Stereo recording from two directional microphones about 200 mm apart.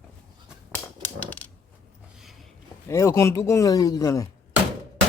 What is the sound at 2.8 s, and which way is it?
A man's voice, 15° left (ahead or behind).